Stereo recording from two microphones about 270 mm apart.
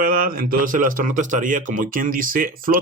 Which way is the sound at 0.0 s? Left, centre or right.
Right.